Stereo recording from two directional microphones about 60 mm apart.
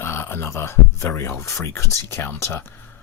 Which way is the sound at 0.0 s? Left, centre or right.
Left.